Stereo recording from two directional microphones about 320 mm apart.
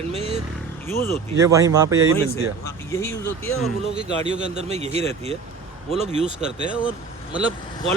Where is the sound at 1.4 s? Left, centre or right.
Centre.